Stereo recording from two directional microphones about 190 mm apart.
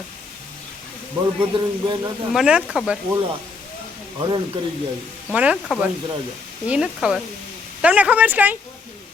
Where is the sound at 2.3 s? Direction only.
5° right (ahead or behind).